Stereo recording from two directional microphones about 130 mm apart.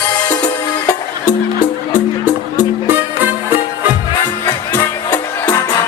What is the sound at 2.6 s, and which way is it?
Music, 15° right (ahead or behind).